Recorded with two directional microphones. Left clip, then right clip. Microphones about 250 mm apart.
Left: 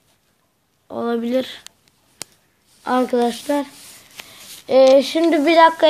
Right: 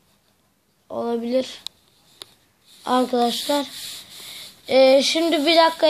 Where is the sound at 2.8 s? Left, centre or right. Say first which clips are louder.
Left 2 dB; centre.